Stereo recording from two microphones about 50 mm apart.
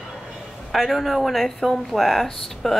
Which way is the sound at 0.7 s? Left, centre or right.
Centre.